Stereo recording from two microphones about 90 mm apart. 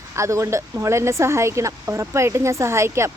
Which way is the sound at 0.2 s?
35° right (ahead or behind).